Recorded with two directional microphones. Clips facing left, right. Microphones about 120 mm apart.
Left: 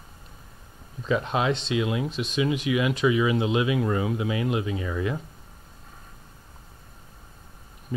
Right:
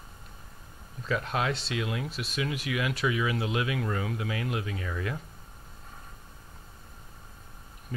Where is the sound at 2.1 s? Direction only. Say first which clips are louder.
Left 7 dB; 5° right (ahead or behind).